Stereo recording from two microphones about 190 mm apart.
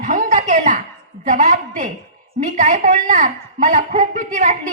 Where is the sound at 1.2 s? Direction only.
40° right (ahead or behind).